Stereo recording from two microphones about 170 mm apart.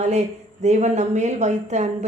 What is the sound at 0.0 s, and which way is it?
A woman's voice, 40° right (ahead or behind).